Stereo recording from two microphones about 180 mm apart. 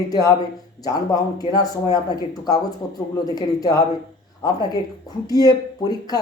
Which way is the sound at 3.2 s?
20° left (ahead or behind).